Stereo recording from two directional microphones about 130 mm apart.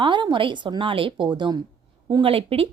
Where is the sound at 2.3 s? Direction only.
45° right (ahead or behind).